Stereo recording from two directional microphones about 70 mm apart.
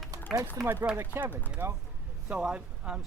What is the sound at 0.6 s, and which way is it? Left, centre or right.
Speech, right.